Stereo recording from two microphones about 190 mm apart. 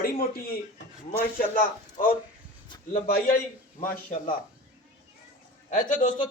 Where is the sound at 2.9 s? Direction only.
50° left (ahead or behind).